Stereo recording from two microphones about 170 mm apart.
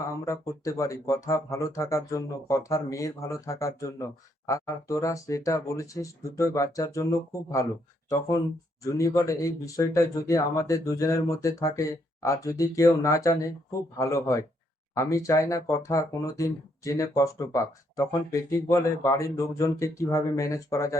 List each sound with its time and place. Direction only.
0.1 s speech: 20° left (ahead or behind)
8.8 s speech: 20° left (ahead or behind)